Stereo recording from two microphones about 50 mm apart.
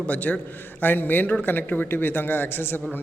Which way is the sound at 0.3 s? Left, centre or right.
Left.